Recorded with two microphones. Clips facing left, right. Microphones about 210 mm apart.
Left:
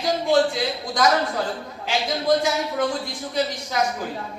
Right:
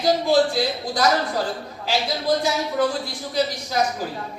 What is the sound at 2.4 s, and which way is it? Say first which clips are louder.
Speech: right 1 dB; 35° right (ahead or behind).